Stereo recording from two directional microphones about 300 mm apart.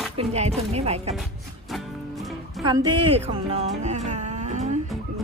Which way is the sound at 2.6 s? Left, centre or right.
Centre.